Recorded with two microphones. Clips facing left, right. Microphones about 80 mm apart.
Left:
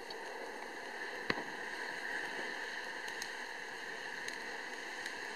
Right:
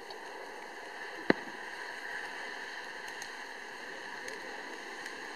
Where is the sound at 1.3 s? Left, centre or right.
Right.